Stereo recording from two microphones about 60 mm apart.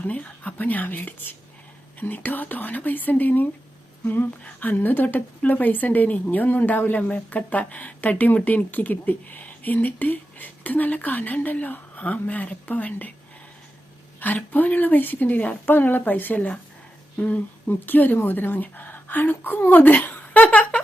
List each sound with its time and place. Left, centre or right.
0.1 s a woman's voice: left
14.2 s a woman's voice: left
20.4 s a sound: left